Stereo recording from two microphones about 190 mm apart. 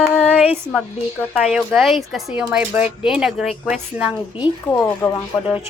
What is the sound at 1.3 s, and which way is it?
Speech, centre (ahead or behind).